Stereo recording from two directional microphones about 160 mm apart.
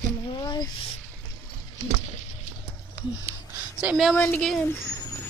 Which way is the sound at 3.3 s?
15° right (ahead or behind).